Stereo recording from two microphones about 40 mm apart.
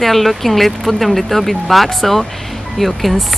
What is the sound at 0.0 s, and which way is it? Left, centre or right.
Speech, centre.